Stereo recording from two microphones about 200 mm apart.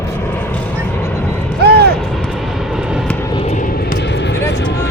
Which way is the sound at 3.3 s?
35° left (ahead or behind).